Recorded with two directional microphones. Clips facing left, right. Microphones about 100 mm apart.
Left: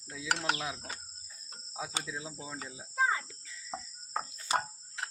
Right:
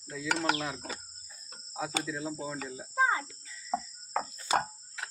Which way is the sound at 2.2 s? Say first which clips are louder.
Right 8 dB; 55° right (ahead or behind).